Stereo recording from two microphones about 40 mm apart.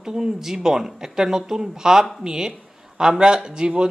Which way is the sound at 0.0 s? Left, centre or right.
Centre.